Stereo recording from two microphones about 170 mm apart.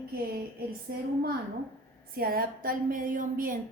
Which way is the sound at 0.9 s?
70° right (ahead or behind).